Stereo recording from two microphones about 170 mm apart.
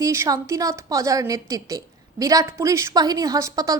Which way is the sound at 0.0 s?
15° right (ahead or behind).